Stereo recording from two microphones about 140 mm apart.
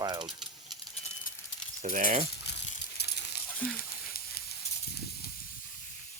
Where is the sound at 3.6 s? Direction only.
10° left (ahead or behind).